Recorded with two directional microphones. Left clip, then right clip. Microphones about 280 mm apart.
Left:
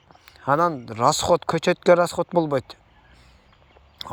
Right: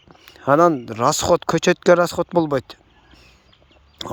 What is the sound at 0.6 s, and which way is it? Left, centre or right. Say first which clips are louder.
Speech: right 9 dB; right.